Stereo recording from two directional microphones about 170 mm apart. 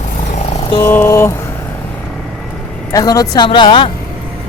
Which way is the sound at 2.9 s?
20° left (ahead or behind).